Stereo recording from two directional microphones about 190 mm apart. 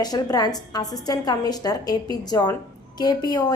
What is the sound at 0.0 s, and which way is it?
A woman's voice, 20° left (ahead or behind).